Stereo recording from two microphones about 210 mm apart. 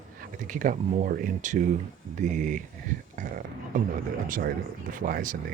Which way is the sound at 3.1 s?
40° right (ahead or behind).